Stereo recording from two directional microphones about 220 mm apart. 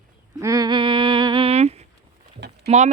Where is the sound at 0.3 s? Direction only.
15° right (ahead or behind).